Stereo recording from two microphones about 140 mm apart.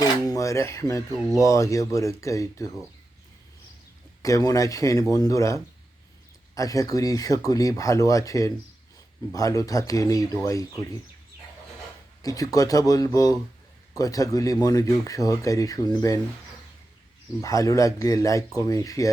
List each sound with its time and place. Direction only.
0.0 s a sound: 25° left (ahead or behind)
1.4 s speech: 25° left (ahead or behind)
4.2 s speech: 25° left (ahead or behind)
12.2 s speech: 25° left (ahead or behind)
17.4 s speech: 25° left (ahead or behind)